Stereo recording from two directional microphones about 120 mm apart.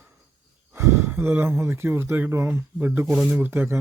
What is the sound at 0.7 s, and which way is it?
Speech, 25° right (ahead or behind).